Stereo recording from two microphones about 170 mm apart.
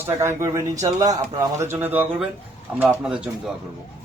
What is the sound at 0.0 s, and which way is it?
A man's voice, 15° right (ahead or behind).